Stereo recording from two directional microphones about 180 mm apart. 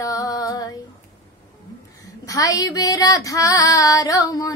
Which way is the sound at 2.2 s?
20° left (ahead or behind).